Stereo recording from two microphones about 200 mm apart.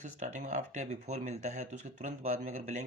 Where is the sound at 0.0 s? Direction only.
40° right (ahead or behind).